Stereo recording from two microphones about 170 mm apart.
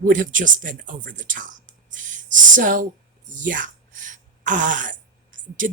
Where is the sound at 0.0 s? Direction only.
50° right (ahead or behind).